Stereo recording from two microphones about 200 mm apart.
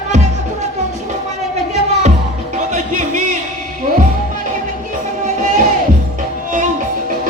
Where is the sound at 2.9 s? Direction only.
40° right (ahead or behind).